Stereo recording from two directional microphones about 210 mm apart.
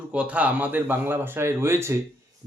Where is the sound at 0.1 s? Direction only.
5° right (ahead or behind).